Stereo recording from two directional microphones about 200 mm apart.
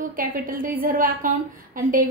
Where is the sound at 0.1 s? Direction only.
45° right (ahead or behind).